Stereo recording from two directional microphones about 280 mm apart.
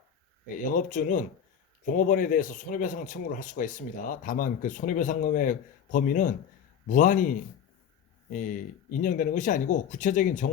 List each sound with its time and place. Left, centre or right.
0.6 s a man's voice: left